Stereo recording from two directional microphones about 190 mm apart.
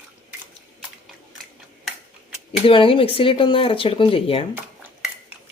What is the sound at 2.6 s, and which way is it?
Speech, 30° left (ahead or behind).